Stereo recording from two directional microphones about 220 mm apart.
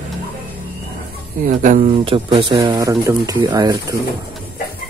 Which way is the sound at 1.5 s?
35° right (ahead or behind).